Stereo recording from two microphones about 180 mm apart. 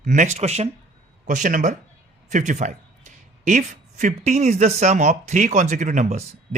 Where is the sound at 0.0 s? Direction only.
45° right (ahead or behind).